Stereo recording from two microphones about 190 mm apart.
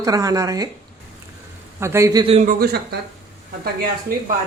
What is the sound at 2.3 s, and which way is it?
Speech, 50° right (ahead or behind).